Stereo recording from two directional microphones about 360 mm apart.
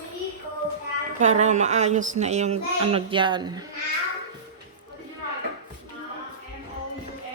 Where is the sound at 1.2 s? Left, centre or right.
Centre.